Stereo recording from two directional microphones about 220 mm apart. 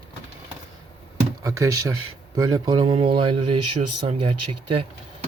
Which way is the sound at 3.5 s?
90° right.